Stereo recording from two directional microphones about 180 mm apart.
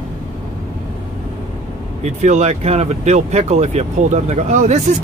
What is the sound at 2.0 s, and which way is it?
Speech, 40° right (ahead or behind).